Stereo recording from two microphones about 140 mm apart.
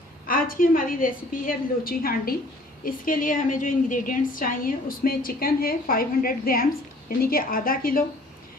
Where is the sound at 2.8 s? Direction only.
75° left (ahead or behind).